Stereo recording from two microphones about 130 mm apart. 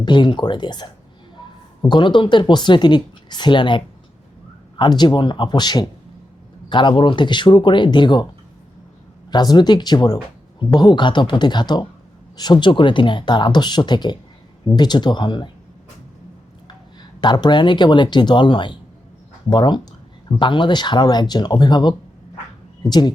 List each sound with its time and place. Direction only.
0.0 s speech: 35° left (ahead or behind)
9.3 s speech: 30° left (ahead or behind)
17.0 s speech: 35° left (ahead or behind)